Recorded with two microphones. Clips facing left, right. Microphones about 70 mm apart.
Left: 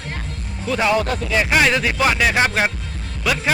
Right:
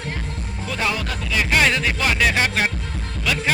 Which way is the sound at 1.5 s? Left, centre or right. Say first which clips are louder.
Left 1 dB; centre.